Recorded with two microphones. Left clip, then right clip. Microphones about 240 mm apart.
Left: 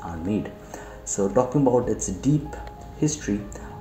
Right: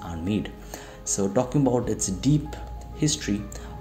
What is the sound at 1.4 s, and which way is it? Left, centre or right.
Speech, right.